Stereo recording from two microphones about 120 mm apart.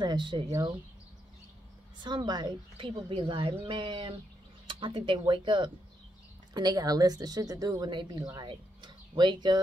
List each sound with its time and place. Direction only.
0.0 s a woman's voice: 40° right (ahead or behind)
2.0 s a woman's voice: 35° right (ahead or behind)